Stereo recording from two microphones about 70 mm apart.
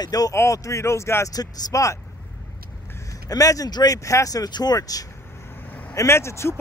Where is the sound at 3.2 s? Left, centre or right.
Left.